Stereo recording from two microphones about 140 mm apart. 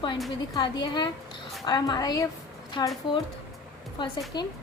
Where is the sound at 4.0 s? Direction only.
35° left (ahead or behind).